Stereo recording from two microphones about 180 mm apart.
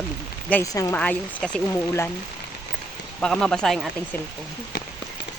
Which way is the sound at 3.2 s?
5° left (ahead or behind).